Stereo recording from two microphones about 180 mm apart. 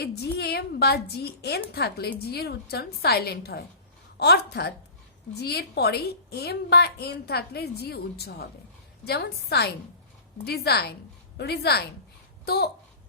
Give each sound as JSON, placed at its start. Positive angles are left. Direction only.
{"t": 0.0, "sound": "a woman's voice", "side_deg": 65}